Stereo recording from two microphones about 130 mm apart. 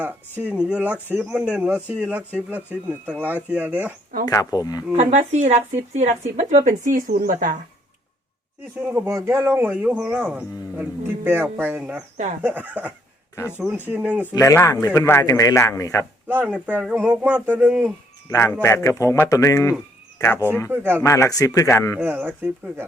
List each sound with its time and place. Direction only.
0.4 s speech: 10° right (ahead or behind)
4.3 s a man's voice: 30° left (ahead or behind)
4.9 s speech: 60° right (ahead or behind); by 7.5 s 90° right
8.8 s speech: 15° right (ahead or behind)
14.3 s a man's voice: 25° left (ahead or behind)
16.5 s speech: 10° right (ahead or behind)
18.3 s a man's voice: 25° left (ahead or behind)
20.7 s speech: 15° right (ahead or behind)
21.0 s a man's voice: 25° left (ahead or behind)
21.9 s speech: 10° right (ahead or behind)